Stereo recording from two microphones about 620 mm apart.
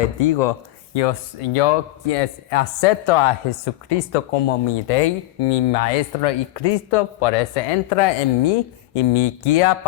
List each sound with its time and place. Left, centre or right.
0.2 s speech: left
0.9 s speech: left